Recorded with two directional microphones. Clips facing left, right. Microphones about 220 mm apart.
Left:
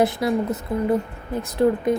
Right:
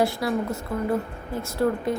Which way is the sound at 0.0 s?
20° left (ahead or behind).